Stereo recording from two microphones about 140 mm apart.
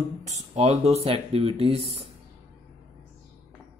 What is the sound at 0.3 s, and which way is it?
Speech, 50° right (ahead or behind).